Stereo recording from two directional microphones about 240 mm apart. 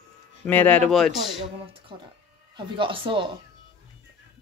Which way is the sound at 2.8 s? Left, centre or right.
Right.